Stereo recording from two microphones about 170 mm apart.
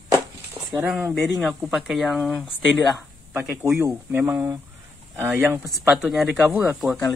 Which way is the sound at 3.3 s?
10° right (ahead or behind).